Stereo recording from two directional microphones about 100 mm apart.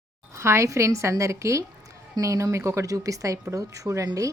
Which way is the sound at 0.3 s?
25° right (ahead or behind).